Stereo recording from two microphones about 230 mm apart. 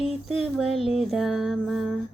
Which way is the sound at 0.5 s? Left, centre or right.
Centre.